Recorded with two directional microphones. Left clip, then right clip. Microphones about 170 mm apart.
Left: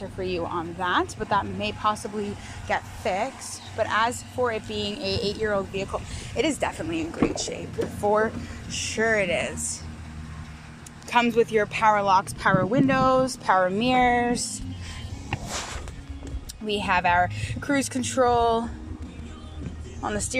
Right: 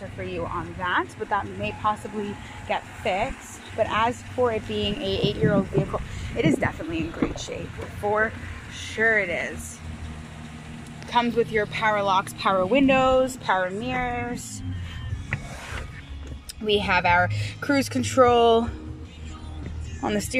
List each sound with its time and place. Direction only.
0.3 s speech: 10° left (ahead or behind)
11.1 s speech: 5° left (ahead or behind)
13.8 s speech: 25° left (ahead or behind)
16.6 s speech: centre (ahead or behind)
20.0 s speech: 10° right (ahead or behind)